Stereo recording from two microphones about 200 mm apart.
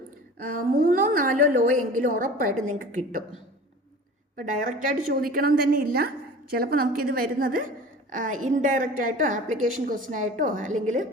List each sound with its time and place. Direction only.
0.4 s a woman's voice: 45° right (ahead or behind)
4.4 s a woman's voice: 40° right (ahead or behind)